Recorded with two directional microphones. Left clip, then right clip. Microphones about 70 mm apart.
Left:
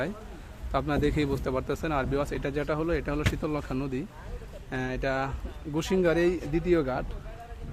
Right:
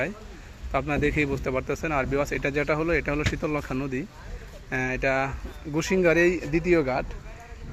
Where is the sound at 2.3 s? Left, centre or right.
Right; by 4.0 s centre.